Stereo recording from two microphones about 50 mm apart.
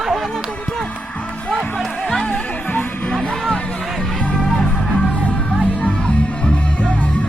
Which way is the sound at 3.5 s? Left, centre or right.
Left.